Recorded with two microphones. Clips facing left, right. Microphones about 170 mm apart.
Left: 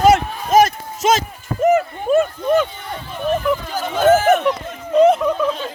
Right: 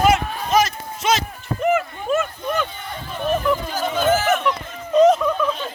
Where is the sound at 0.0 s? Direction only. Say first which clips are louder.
Left 4 dB; 40° left (ahead or behind).